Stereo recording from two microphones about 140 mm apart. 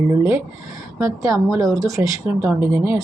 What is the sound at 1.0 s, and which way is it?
A woman's voice, 20° right (ahead or behind).